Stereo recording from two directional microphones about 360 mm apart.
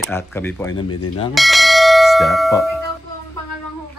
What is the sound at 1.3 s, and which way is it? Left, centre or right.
Bell, centre.